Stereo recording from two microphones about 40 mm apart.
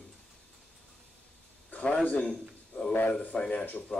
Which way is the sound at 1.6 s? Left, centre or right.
Left.